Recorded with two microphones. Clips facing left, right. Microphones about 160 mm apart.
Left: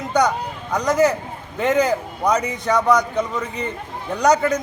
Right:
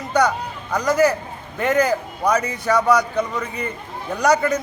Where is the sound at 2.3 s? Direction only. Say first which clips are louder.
Even; 20° left (ahead or behind).